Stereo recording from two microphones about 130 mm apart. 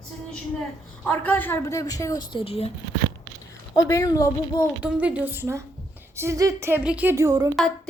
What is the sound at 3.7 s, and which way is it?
Speech, 25° left (ahead or behind).